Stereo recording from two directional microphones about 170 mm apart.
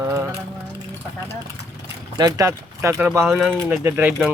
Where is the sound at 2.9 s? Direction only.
10° right (ahead or behind).